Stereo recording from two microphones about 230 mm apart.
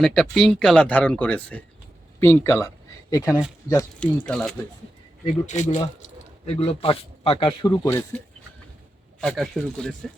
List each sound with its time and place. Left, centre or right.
0.0 s speech: centre
5.5 s speech: left
7.9 s speech: centre
9.2 s speech: centre